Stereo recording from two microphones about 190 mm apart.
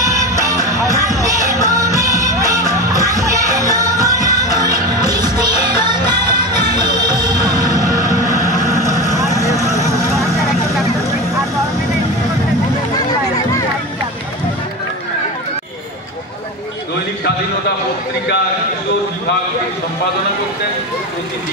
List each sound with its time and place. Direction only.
0.0 s music: 15° right (ahead or behind)
6.6 s music: 35° left (ahead or behind)
7.1 s music: 20° right (ahead or behind)
8.3 s vehicle: 15° right (ahead or behind)
9.3 s vehicle: 15° left (ahead or behind)
9.6 s a sound: 15° right (ahead or behind)